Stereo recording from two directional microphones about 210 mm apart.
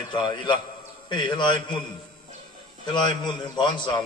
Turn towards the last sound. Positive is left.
turn(degrees=20)  # may be behind; listen again after turning